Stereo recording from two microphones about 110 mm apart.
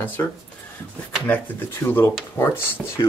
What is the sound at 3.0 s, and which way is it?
Speech, 35° left (ahead or behind).